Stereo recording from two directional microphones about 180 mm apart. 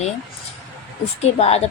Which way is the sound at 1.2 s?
35° left (ahead or behind).